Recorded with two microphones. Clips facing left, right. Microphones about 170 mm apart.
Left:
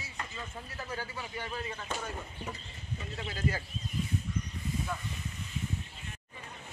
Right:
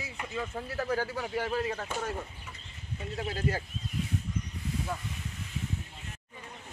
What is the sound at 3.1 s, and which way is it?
Speech, 50° right (ahead or behind).